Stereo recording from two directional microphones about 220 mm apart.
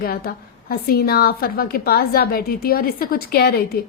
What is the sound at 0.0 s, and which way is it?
A woman's voice, 45° left (ahead or behind).